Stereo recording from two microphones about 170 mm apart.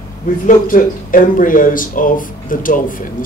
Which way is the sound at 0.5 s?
50° left (ahead or behind).